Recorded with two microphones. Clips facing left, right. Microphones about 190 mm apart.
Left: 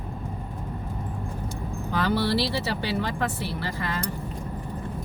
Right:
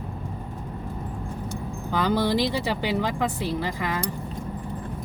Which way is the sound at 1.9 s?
15° right (ahead or behind).